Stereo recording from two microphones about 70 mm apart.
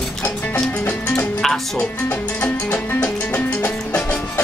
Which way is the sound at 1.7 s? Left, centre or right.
Left.